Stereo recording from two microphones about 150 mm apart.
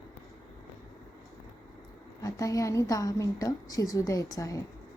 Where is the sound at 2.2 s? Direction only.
20° left (ahead or behind).